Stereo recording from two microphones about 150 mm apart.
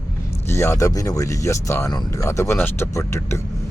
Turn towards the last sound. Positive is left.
turn(degrees=20)  # may be behind; listen again after turning